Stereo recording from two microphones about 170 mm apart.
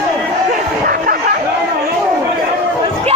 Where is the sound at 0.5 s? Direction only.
55° right (ahead or behind).